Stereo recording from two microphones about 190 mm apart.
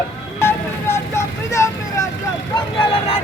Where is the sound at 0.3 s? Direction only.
15° left (ahead or behind).